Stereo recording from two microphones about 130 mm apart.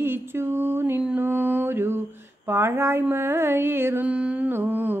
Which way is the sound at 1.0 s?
15° right (ahead or behind).